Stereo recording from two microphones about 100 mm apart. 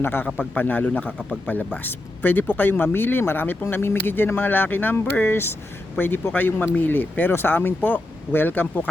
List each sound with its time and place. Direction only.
0.0 s speech: 20° left (ahead or behind)